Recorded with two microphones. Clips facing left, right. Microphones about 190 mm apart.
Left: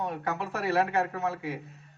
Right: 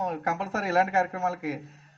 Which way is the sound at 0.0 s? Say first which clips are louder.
Right 2 dB; 40° right (ahead or behind).